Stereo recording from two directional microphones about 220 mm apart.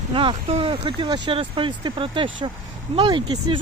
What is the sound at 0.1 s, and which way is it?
Speech, 25° right (ahead or behind).